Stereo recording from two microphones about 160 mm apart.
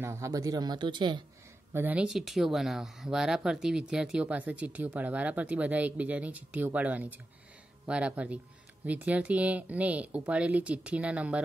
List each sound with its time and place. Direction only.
0.0 s speech: 15° right (ahead or behind)
1.7 s speech: 10° right (ahead or behind)